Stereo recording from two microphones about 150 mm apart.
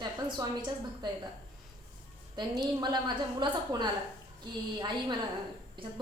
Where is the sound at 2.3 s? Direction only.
25° right (ahead or behind).